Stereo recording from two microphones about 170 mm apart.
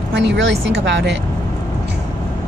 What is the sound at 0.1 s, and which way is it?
A woman's voice, 90° right.